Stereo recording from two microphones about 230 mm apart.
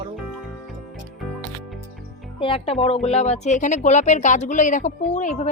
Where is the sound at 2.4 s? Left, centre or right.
Left.